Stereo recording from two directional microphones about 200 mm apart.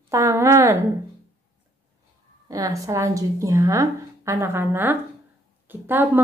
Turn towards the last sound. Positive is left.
turn(degrees=-10)  # may be behind; listen again after turning